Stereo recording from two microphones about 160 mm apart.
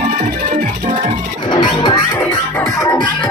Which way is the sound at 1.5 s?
30° left (ahead or behind).